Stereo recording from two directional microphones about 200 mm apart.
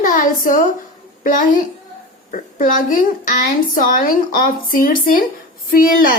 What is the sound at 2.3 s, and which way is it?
A woman's voice, 45° left (ahead or behind).